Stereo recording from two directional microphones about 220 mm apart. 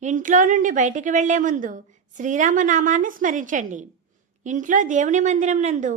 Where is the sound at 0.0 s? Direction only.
35° right (ahead or behind).